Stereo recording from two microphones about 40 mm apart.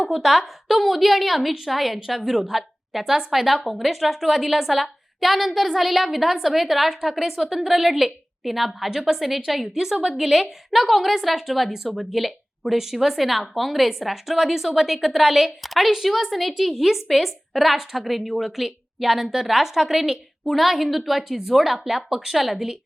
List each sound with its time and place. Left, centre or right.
0.0 s a woman's voice: centre
3.0 s a woman's voice: centre
3.3 s a woman's voice: centre